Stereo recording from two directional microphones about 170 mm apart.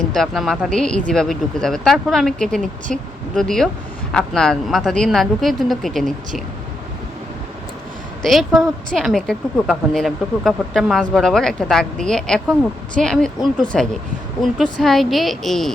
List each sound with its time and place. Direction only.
0.1 s a woman's voice: centre (ahead or behind)
8.2 s a woman's voice: centre (ahead or behind)